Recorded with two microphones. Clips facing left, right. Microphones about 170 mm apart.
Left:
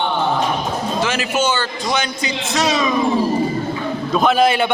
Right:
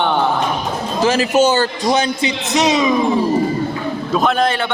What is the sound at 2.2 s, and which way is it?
Speech, 20° right (ahead or behind).